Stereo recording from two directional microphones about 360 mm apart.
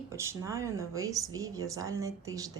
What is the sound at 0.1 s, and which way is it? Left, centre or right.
Speech, centre.